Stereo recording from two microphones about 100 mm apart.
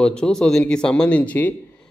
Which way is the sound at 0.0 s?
10° left (ahead or behind).